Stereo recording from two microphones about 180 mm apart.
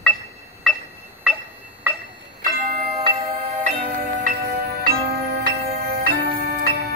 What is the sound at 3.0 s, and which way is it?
Music, 40° right (ahead or behind).